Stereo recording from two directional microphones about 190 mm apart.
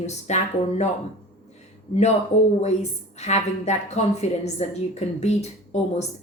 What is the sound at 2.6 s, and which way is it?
A woman's voice, 35° left (ahead or behind).